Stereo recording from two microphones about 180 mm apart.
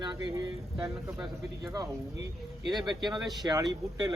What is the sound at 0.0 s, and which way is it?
Speech, 25° right (ahead or behind).